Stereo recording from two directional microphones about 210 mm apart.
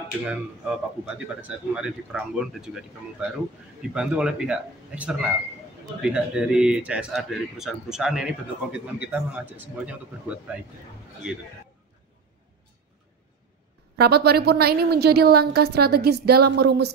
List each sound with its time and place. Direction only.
0.3 s speech: 5° right (ahead or behind)
13.9 s a woman's voice: 50° right (ahead or behind)